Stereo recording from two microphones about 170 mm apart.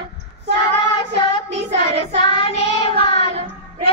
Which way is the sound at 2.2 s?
30° left (ahead or behind).